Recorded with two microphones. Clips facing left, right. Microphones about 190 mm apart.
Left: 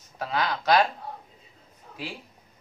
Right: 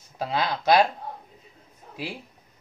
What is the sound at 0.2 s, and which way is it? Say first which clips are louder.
Speech: right 1 dB; 25° right (ahead or behind).